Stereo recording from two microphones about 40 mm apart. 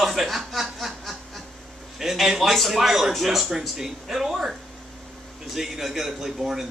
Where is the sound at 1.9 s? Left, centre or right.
Centre.